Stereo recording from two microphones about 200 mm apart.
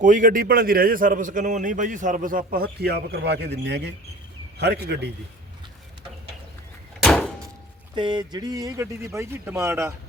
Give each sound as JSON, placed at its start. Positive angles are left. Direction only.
{"t": 0.0, "sound": "a man's voice", "side_deg": -40}
{"t": 7.0, "sound": "a sound", "side_deg": 0}
{"t": 7.9, "sound": "speech", "side_deg": -20}